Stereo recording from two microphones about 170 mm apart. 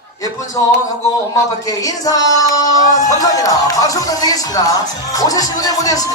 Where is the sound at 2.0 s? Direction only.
20° left (ahead or behind).